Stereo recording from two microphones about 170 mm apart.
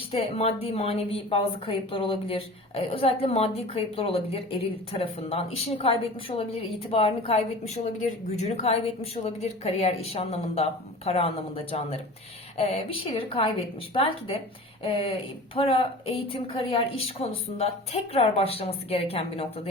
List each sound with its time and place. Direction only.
0.1 s a woman's voice: 35° left (ahead or behind)
8.4 s a woman's voice: 40° left (ahead or behind)